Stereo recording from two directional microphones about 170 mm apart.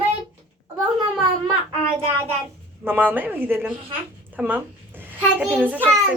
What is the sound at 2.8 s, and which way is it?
A woman's voice, 10° right (ahead or behind).